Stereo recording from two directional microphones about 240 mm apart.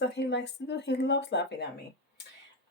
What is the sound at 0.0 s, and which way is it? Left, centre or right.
Speech, left.